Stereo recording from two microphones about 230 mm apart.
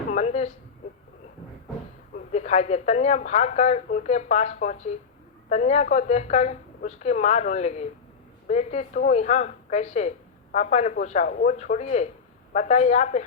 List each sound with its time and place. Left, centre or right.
0.1 s speech: left
2.1 s a woman's voice: left